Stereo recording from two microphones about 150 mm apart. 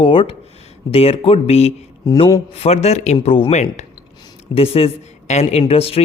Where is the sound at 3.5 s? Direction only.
50° left (ahead or behind).